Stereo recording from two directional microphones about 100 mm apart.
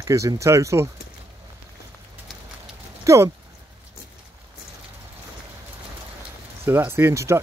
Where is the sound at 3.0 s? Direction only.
30° right (ahead or behind).